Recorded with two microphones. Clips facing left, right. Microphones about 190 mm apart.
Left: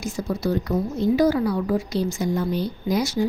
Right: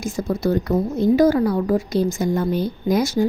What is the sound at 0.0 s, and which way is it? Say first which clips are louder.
A woman's voice: right 3 dB; 50° right (ahead or behind).